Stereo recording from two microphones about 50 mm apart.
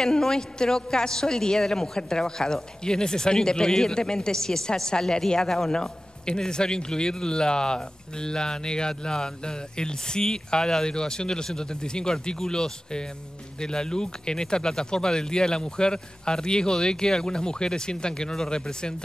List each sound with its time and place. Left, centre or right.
0.0 s a man's voice: centre